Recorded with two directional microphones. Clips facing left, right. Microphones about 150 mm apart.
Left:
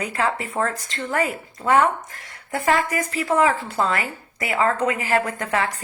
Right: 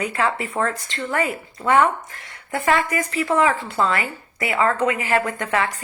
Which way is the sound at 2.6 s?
40° left (ahead or behind).